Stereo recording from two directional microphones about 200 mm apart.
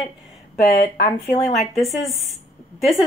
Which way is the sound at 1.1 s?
35° left (ahead or behind).